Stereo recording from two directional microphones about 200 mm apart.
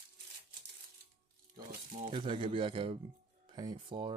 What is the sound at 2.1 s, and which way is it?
A man's voice, 25° right (ahead or behind).